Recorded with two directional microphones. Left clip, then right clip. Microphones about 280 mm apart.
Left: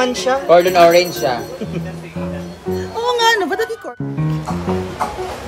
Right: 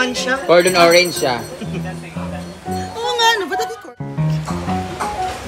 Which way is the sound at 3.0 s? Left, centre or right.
Left.